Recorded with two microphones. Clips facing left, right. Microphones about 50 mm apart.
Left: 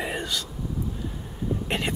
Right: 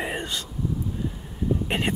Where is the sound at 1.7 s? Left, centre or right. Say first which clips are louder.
Left 1 dB; right.